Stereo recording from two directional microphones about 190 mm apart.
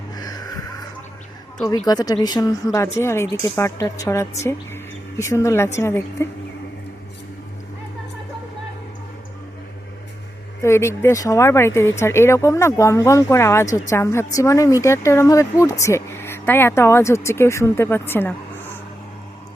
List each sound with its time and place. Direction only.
0.2 s music: 20° left (ahead or behind)
1.9 s a woman's voice: 20° left (ahead or behind)
10.6 s speech: 15° left (ahead or behind)